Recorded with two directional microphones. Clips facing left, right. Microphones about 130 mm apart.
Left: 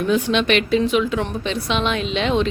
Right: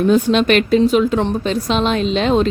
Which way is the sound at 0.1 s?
40° right (ahead or behind).